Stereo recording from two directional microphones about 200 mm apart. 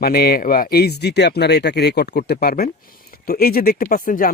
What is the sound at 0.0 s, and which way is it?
Speech, 50° left (ahead or behind).